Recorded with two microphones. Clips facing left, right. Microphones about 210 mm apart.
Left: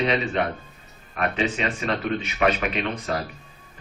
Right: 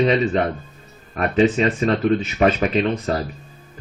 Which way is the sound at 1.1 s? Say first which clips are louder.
Right 8 dB; 35° right (ahead or behind).